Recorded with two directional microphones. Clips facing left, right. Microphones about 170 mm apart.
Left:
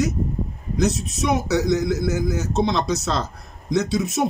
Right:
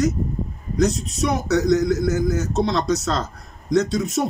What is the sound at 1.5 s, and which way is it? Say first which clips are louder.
Speech: right 2 dB; 10° left (ahead or behind).